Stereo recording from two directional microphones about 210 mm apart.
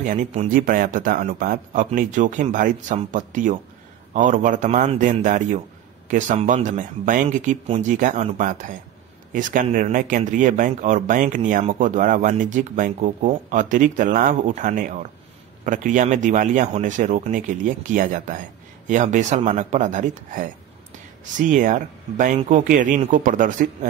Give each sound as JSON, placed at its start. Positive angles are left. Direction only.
{"t": 0.0, "sound": "speech", "side_deg": -35}